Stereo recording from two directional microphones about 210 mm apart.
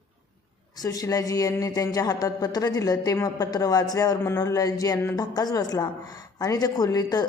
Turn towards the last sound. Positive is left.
turn(degrees=20)  # may be behind; listen again after turning